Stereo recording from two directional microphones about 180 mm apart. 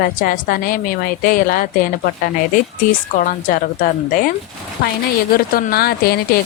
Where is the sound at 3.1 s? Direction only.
45° left (ahead or behind).